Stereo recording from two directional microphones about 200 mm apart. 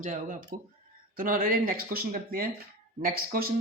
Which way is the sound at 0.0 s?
40° right (ahead or behind).